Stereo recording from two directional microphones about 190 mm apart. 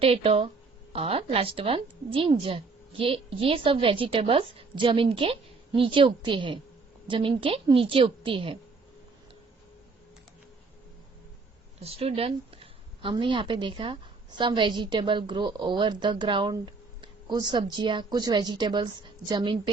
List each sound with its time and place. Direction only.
0.0 s a woman's voice: 30° right (ahead or behind)
11.8 s a woman's voice: 30° right (ahead or behind)